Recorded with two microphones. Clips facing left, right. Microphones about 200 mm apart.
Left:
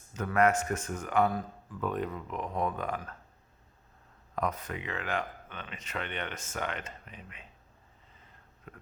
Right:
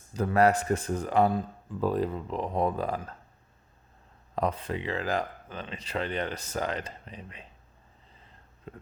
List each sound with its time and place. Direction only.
0.1 s a man's voice: 35° right (ahead or behind)
4.4 s a man's voice: 30° right (ahead or behind)
8.2 s a sound: 25° right (ahead or behind)